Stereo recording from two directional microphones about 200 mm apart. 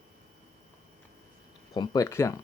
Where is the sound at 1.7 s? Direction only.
20° left (ahead or behind).